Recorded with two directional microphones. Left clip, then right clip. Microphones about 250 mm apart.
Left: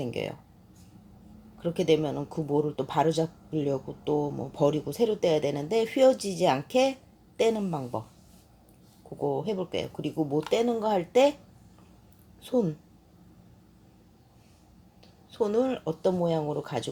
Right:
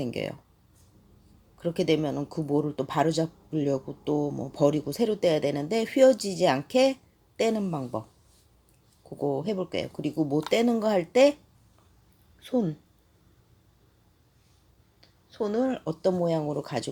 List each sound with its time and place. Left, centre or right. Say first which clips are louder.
0.0 s speech: right 1 dB; centre
1.6 s speech: left 1 dB; centre
9.0 s speech: even; centre
10.2 s speech: right 1 dB; centre
12.4 s speech: left 1 dB; centre
15.3 s speech: left 1 dB; centre